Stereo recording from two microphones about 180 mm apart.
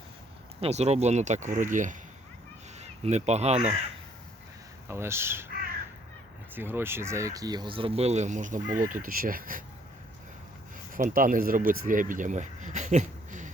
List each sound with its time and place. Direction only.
0.6 s speech: 35° right (ahead or behind)
4.9 s speech: 15° right (ahead or behind)
6.5 s speech: 10° right (ahead or behind); by 9.6 s 50° right (ahead or behind)
10.9 s speech: 50° right (ahead or behind)